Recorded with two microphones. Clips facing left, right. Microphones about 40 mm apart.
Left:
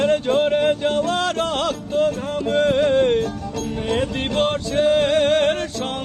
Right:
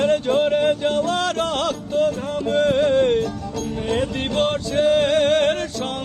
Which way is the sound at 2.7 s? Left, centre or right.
Centre.